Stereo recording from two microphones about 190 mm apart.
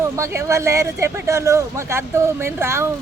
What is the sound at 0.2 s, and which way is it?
Speech, 15° right (ahead or behind).